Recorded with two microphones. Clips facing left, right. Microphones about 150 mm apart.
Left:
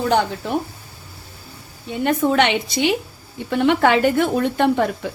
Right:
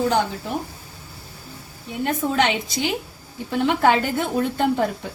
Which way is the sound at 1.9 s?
80° left.